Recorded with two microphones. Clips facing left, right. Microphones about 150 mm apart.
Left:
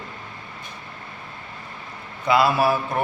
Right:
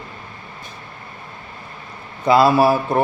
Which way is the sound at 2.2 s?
35° right (ahead or behind).